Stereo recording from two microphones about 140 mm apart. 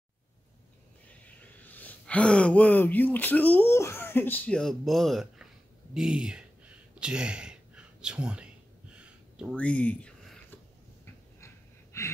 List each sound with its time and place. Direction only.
1.2 s speech: 10° left (ahead or behind)
5.9 s a sound: 5° right (ahead or behind)
9.6 s speech: 10° left (ahead or behind)
11.4 s gasp: 20° left (ahead or behind)